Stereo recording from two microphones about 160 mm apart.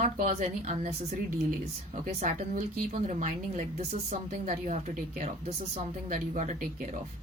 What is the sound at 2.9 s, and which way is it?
A woman's voice, 50° right (ahead or behind).